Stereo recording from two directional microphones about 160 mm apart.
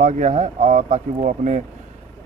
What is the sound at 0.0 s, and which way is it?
Speech, 50° right (ahead or behind).